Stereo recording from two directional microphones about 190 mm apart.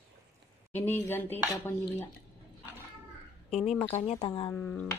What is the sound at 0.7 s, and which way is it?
Speech, 10° left (ahead or behind).